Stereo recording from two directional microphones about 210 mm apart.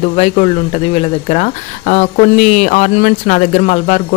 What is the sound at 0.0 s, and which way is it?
Speech, 30° left (ahead or behind).